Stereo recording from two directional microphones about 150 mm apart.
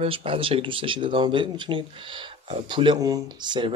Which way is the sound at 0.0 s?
35° right (ahead or behind).